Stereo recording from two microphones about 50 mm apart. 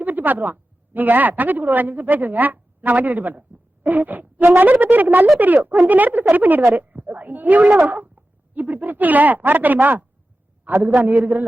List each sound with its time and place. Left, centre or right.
0.0 s a woman's voice: right
6.7 s a sound: right
7.9 s speech: right